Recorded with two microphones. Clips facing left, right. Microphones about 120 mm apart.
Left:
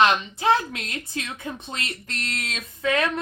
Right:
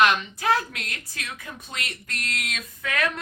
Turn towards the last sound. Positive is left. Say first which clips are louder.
# left 4 dB
turn(degrees=25)  # may be behind; listen again after turning